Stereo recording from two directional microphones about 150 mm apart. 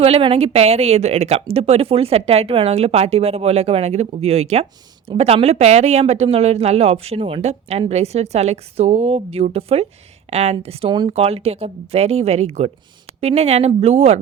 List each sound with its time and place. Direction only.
0.0 s speech: 40° right (ahead or behind)